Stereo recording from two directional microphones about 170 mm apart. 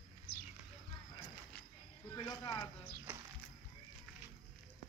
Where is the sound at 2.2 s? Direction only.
20° left (ahead or behind).